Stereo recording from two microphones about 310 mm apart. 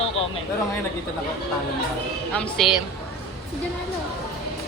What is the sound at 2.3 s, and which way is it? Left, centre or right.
Speech, centre.